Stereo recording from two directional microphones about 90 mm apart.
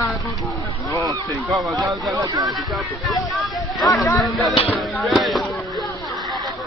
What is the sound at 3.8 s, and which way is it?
Speech, 40° left (ahead or behind).